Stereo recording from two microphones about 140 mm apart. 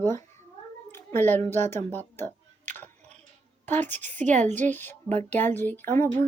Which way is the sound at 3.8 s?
10° left (ahead or behind).